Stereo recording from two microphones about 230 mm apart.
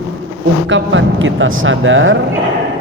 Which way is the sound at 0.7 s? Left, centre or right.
Right.